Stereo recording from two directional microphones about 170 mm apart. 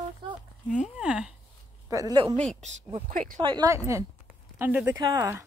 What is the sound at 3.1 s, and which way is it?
Speech, 50° right (ahead or behind).